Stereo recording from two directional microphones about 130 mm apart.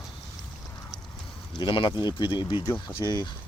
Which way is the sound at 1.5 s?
35° left (ahead or behind).